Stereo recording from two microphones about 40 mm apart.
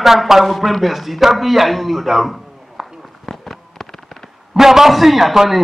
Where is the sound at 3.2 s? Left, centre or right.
Centre.